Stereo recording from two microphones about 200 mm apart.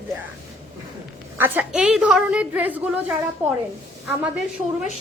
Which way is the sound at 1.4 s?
10° right (ahead or behind).